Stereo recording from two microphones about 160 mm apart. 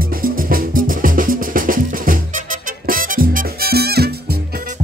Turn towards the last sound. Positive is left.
turn(degrees=-85)